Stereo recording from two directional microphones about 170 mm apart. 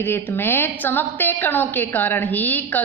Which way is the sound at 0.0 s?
15° left (ahead or behind).